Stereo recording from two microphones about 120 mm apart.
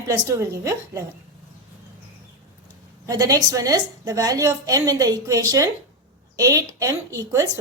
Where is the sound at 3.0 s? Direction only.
30° right (ahead or behind).